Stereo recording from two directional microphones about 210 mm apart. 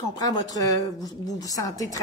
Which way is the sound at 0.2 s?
15° left (ahead or behind).